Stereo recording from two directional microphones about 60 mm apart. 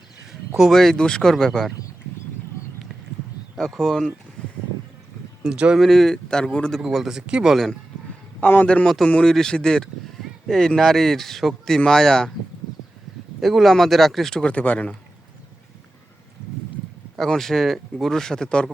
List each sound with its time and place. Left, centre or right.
0.5 s speech: centre
3.5 s speech: centre
5.4 s speech: centre
5.7 s speech: centre
6.8 s speech: centre
7.4 s speech: centre
8.4 s a man's voice: left
8.6 s a man's voice: left
13.4 s speech: centre
14.5 s speech: left
17.2 s a man's voice: centre